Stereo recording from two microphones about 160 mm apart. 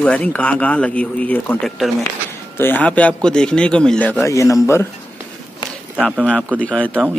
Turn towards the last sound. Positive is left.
turn(degrees=5)  # may be behind; listen again after turning